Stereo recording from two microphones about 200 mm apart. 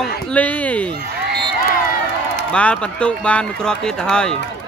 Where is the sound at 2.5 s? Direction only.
5° left (ahead or behind).